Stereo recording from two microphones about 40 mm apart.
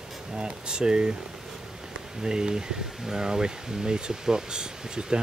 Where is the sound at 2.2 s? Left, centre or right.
Right.